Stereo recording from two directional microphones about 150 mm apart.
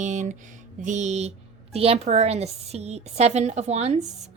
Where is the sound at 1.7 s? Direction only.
40° right (ahead or behind).